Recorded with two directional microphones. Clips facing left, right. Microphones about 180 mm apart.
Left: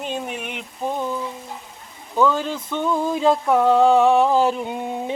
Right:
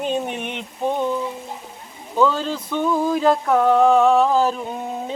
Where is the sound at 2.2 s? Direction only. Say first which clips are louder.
Even; 15° left (ahead or behind).